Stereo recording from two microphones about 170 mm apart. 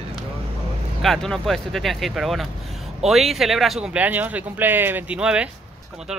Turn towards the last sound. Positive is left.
turn(degrees=-5)  # may be behind; listen again after turning